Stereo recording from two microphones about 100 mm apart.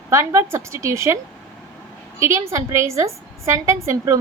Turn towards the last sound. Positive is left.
turn(degrees=-30)  # may be behind; listen again after turning